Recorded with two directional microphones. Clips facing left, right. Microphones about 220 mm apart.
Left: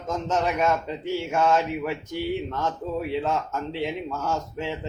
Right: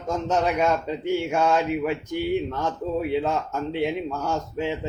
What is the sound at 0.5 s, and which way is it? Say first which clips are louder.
Speech: right 1 dB; 15° right (ahead or behind).